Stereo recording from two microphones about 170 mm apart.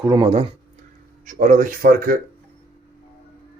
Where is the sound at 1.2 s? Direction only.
50° right (ahead or behind).